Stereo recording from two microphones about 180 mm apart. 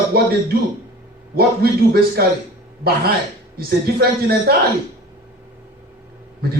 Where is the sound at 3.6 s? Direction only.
60° right (ahead or behind).